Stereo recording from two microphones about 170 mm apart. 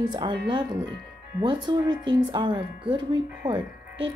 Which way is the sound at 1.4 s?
25° right (ahead or behind).